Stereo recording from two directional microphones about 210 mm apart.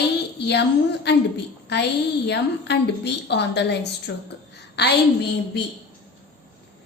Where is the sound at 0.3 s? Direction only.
55° left (ahead or behind).